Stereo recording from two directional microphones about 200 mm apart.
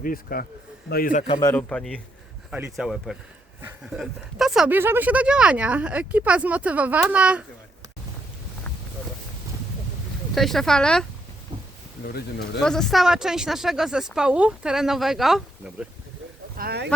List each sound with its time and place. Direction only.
0.0 s speech: 45° left (ahead or behind)
1.4 s speech: 15° left (ahead or behind)
2.5 s speech: 5° right (ahead or behind)
10.3 s speech: centre (ahead or behind)
12.0 s speech: 50° left (ahead or behind)
12.5 s speech: centre (ahead or behind)
16.6 s speech: 55° right (ahead or behind)